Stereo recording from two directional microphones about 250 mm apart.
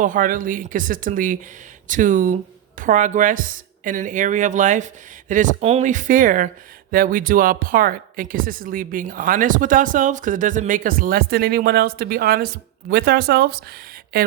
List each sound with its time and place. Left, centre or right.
0.0 s speech: right